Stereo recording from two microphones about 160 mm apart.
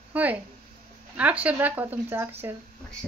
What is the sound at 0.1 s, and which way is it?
Speech, 10° right (ahead or behind).